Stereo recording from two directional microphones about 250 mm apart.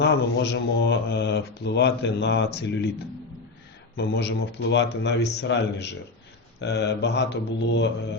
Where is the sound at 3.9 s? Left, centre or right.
Left.